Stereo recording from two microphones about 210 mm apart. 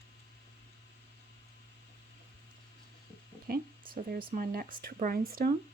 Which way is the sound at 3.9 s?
45° right (ahead or behind).